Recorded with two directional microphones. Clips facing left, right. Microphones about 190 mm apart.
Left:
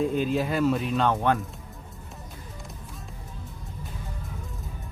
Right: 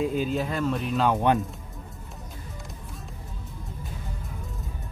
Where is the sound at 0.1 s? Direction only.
Centre (ahead or behind).